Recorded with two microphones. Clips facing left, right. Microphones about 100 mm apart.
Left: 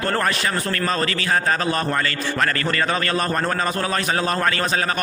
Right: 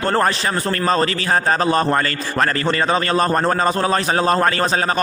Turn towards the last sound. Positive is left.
turn(degrees=-35)  # may be behind; listen again after turning